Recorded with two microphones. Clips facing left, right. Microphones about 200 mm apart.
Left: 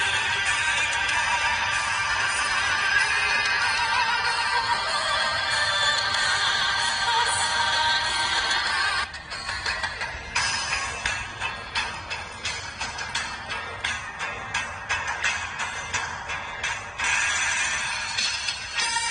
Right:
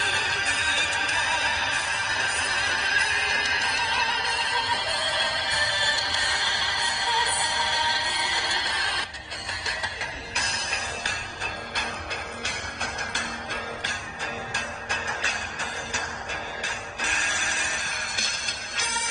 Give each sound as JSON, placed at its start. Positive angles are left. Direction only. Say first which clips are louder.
{"t": 0.0, "sound": "music", "louder": "right 2 dB", "side_deg": -40}
{"t": 10.3, "sound": "music", "louder": "left 1 dB", "side_deg": -30}
{"t": 12.5, "sound": "music", "louder": "right 4 dB", "side_deg": -55}
{"t": 14.5, "sound": "music", "louder": "right 3 dB", "side_deg": -40}
{"t": 16.6, "sound": "music", "louder": "right 2 dB", "side_deg": -40}